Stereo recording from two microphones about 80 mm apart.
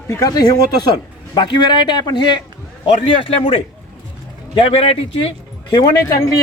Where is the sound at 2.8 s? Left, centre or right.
Left.